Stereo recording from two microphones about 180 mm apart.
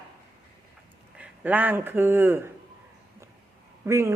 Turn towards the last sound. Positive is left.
turn(degrees=-15)  # may be behind; listen again after turning